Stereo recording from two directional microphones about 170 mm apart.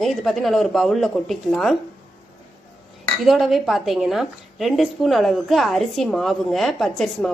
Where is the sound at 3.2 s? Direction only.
Centre (ahead or behind).